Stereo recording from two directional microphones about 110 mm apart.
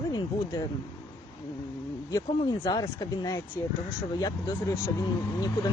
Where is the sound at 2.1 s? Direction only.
30° left (ahead or behind).